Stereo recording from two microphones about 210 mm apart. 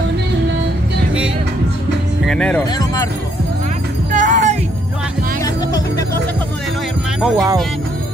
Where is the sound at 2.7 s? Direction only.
15° left (ahead or behind).